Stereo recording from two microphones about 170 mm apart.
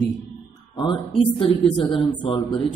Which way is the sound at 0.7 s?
30° left (ahead or behind).